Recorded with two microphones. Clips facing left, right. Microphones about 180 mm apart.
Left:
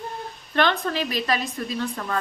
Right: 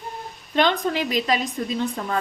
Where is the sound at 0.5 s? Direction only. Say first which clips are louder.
Right 2 dB; 15° right (ahead or behind).